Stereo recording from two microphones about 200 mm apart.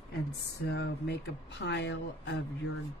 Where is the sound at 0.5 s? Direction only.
55° left (ahead or behind).